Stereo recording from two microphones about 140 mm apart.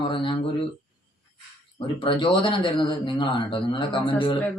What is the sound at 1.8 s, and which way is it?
Speech, 40° left (ahead or behind).